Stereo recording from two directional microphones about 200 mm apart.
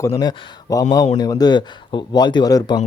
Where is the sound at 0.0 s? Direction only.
20° left (ahead or behind).